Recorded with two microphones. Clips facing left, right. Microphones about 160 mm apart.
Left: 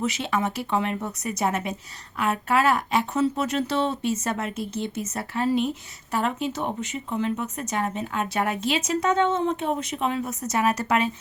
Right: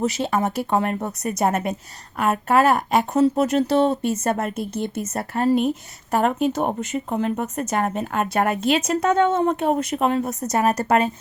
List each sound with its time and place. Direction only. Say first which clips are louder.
0.0 s speech: right 4 dB; 40° right (ahead or behind)